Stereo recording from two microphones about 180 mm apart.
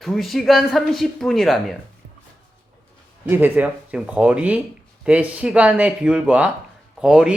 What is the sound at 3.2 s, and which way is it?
Speech, 10° right (ahead or behind).